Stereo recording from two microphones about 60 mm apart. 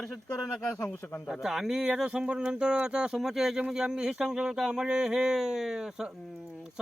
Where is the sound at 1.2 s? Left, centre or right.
Centre.